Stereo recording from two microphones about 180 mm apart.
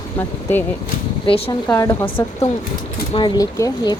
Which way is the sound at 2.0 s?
30° left (ahead or behind).